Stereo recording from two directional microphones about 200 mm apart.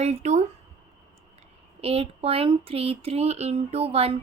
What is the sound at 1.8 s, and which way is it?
Speech, 30° right (ahead or behind).